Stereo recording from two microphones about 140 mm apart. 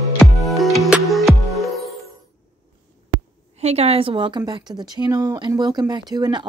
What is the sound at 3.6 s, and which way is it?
A woman's voice, 50° right (ahead or behind).